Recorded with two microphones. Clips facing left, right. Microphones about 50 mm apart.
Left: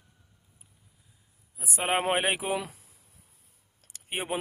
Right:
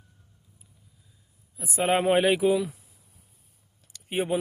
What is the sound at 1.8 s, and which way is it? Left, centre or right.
Speech, left.